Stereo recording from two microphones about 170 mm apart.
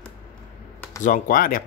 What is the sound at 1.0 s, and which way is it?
Speech, 55° left (ahead or behind).